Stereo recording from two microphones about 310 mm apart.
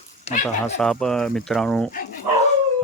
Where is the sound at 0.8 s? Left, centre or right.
Centre.